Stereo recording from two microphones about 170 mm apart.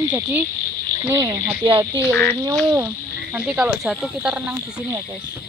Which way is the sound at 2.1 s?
10° left (ahead or behind).